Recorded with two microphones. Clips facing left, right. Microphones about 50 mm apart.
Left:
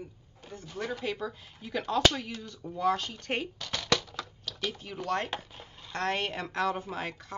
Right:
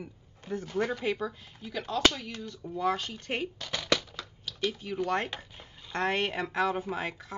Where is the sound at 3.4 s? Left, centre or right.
Centre.